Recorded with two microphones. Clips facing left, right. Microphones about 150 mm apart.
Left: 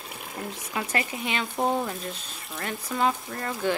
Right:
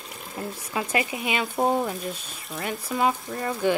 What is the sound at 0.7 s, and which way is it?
Speech, 15° right (ahead or behind).